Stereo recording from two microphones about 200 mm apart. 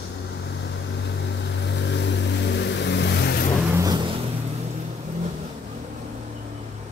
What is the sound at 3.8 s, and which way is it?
Music, 20° right (ahead or behind).